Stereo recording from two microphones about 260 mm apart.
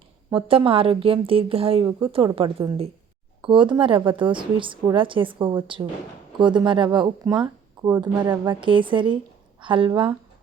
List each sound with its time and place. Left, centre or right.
0.3 s a woman's voice: centre